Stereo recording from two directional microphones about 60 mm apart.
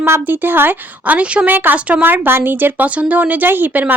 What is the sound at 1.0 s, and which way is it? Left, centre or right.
Speech, right.